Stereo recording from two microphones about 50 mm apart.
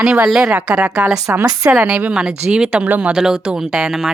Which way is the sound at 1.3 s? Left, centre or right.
Right.